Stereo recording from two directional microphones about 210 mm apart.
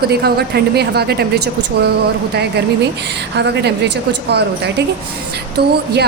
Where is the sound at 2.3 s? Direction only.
50° right (ahead or behind).